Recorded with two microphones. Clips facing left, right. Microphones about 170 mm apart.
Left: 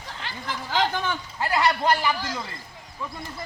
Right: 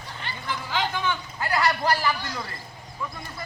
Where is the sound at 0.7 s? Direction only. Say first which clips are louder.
Left 2 dB; 40° left (ahead or behind).